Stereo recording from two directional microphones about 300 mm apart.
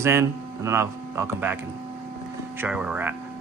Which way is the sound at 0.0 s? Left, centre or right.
Centre.